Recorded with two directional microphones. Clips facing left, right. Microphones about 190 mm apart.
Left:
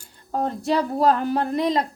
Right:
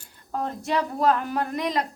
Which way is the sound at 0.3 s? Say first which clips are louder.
Left 5 dB; 35° left (ahead or behind).